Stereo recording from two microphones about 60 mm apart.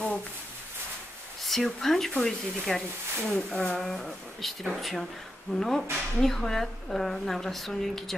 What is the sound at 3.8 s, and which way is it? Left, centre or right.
A woman's voice, centre.